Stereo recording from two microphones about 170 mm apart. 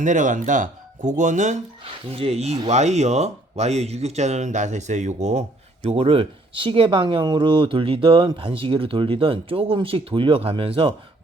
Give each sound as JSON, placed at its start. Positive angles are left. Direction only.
{"t": 0.0, "sound": "speech", "side_deg": -50}
{"t": 2.0, "sound": "speech", "side_deg": -35}